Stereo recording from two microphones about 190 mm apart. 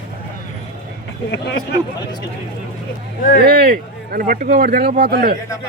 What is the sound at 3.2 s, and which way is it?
Speech, 45° left (ahead or behind).